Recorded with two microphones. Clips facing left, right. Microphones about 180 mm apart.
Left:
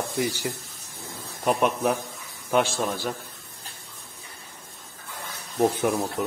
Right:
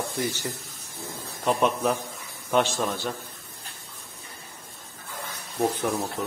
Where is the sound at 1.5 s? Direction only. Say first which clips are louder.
Right 1 dB; 10° left (ahead or behind).